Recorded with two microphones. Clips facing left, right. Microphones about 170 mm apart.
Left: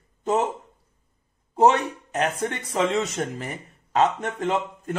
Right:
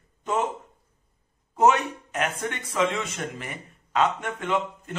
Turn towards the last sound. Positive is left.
turn(degrees=35)  # may be behind; listen again after turning